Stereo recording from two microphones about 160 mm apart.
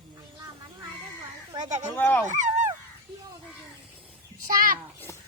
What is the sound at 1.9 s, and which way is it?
Speech, 10° left (ahead or behind).